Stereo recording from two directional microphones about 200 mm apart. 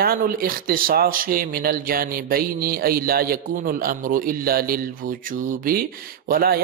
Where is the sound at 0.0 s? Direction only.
45° right (ahead or behind).